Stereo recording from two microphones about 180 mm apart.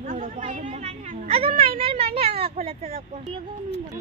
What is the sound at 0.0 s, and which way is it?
Chatter, 45° right (ahead or behind).